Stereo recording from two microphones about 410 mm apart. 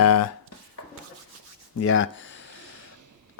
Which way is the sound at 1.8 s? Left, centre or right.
Left.